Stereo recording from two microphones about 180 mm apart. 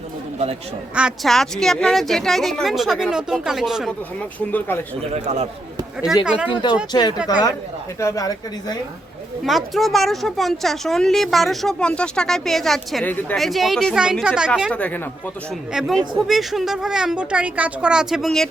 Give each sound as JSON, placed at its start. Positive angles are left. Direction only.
{"t": 0.9, "sound": "speech", "side_deg": 0}
{"t": 4.4, "sound": "speech", "side_deg": 10}
{"t": 5.1, "sound": "a man's voice", "side_deg": -40}
{"t": 6.5, "sound": "speech", "side_deg": 25}
{"t": 9.4, "sound": "speech", "side_deg": 0}
{"t": 14.7, "sound": "speech", "side_deg": 10}